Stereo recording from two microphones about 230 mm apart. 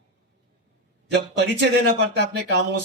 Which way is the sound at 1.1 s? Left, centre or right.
Right.